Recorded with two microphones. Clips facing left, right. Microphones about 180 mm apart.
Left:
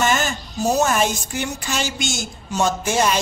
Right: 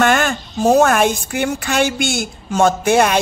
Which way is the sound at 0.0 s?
60° right (ahead or behind).